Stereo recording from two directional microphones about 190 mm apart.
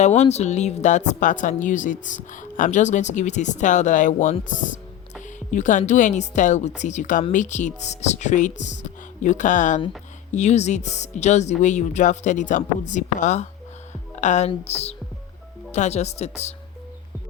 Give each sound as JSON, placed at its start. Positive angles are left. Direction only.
{"t": 0.0, "sound": "speech", "side_deg": 35}